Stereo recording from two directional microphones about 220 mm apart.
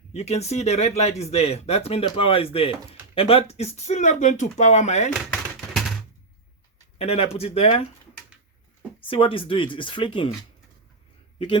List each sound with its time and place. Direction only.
0.1 s speech: 30° left (ahead or behind)
5.1 s a sound: centre (ahead or behind)
7.0 s speech: 30° left (ahead or behind)
9.0 s speech: 25° left (ahead or behind)